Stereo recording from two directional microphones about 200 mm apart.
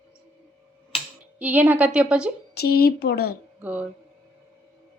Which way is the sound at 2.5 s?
50° left (ahead or behind).